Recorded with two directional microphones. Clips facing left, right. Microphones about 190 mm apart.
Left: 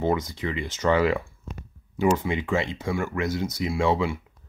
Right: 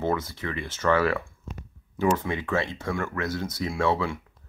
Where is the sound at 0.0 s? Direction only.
15° left (ahead or behind).